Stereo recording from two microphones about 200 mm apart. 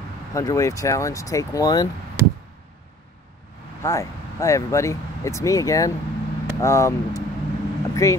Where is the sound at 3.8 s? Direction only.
15° left (ahead or behind).